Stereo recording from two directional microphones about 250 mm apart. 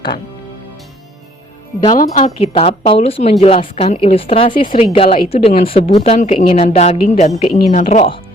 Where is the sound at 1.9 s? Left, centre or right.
Left.